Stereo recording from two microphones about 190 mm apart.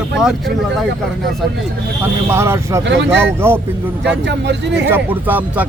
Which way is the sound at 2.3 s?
15° right (ahead or behind).